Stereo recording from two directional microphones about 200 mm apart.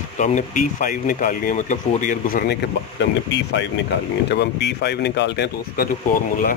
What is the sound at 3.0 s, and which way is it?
Speech, 60° left (ahead or behind).